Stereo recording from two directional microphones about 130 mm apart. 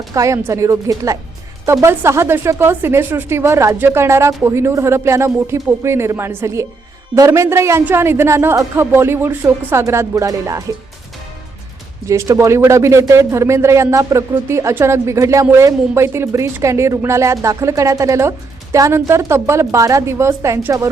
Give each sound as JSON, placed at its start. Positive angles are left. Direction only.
{"t": 0.1, "sound": "speech", "side_deg": -25}
{"t": 12.0, "sound": "speech", "side_deg": -25}